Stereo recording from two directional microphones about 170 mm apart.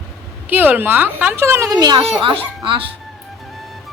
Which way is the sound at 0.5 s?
10° right (ahead or behind).